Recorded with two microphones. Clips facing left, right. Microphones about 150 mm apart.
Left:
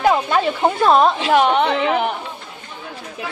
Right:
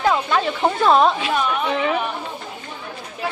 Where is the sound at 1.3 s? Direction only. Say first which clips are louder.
Left 6 dB; 80° left.